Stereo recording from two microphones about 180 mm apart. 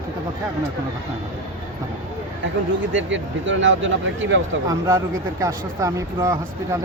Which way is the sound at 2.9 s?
90° right.